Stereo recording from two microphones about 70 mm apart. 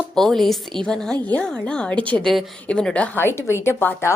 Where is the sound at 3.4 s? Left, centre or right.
Left.